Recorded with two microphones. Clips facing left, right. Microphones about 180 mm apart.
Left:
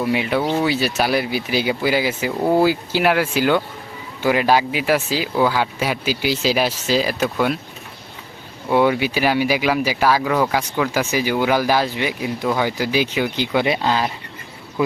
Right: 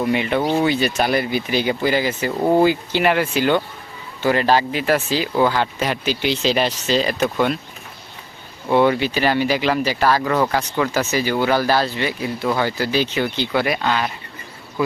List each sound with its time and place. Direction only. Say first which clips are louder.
0.0 s speech: even; 5° left (ahead or behind)
8.7 s speech: right 1 dB; 10° left (ahead or behind)
13.7 s speech: left 1 dB; 30° left (ahead or behind)